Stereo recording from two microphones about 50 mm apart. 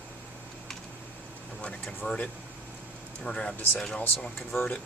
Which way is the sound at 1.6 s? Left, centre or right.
Left.